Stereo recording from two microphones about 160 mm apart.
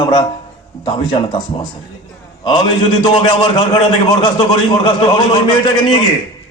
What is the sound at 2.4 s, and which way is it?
A man's voice, 30° left (ahead or behind).